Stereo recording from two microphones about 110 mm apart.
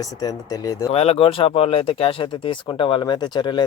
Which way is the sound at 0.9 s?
65° left (ahead or behind).